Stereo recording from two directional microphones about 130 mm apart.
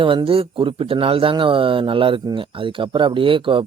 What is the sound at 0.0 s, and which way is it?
Speech, 40° right (ahead or behind).